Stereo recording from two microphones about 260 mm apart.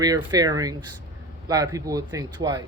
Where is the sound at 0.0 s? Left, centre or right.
Centre.